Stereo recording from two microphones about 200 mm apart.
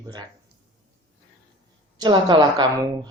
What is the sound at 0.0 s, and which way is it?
Speech, 20° right (ahead or behind).